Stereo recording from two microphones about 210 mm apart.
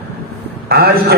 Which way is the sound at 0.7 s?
45° right (ahead or behind).